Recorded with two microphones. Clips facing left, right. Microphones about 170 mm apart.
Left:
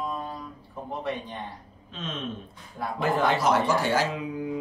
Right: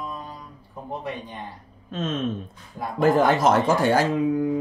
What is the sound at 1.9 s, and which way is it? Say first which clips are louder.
Speech: right 8 dB; 45° right (ahead or behind).